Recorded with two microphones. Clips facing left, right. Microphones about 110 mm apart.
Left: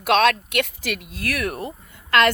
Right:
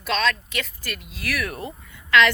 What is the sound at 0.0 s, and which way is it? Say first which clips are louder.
Speech: left 6 dB; 60° left (ahead or behind).